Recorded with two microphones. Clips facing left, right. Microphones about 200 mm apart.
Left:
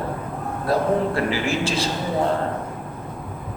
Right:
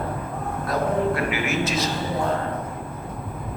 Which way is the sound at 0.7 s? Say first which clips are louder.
Left 2 dB; 30° left (ahead or behind).